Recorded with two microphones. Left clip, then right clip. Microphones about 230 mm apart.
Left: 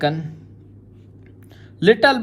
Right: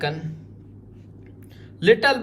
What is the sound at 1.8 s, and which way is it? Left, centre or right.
Speech, left.